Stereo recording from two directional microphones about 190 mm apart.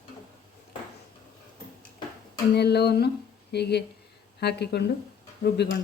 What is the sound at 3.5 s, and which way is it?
Speech, 60° left (ahead or behind).